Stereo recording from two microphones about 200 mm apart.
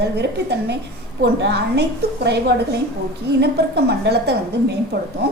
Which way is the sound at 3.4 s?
55° right (ahead or behind).